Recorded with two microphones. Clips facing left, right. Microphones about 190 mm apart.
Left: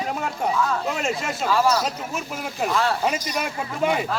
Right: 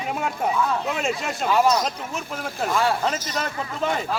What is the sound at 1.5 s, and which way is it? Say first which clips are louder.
Speech: right 1 dB; 20° right (ahead or behind).